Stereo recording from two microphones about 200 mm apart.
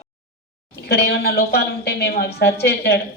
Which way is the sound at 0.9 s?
55° left (ahead or behind).